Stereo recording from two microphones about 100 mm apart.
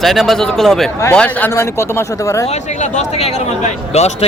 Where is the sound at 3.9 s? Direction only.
90° left.